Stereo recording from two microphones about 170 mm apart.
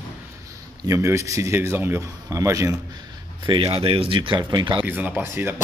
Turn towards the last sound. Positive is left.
turn(degrees=-10)  # may be behind; listen again after turning